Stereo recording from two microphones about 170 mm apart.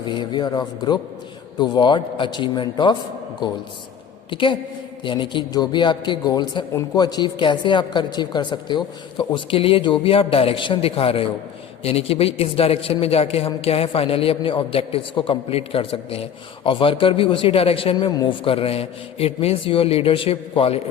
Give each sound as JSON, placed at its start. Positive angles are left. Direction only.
{"t": 0.0, "sound": "speech", "side_deg": 30}
{"t": 4.3, "sound": "a man's voice", "side_deg": 30}